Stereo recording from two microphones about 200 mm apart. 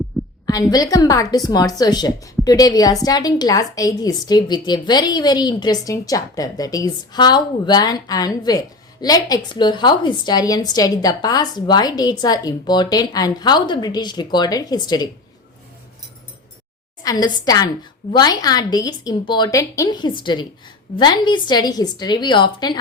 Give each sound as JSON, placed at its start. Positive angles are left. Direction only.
{"t": 0.1, "sound": "a sound", "side_deg": 5}
{"t": 0.7, "sound": "a woman's voice", "side_deg": 20}
{"t": 17.0, "sound": "a woman's voice", "side_deg": 20}